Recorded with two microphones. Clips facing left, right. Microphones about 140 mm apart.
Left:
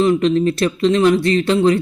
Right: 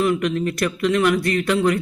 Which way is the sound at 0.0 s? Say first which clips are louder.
Left 6 dB; 25° left (ahead or behind).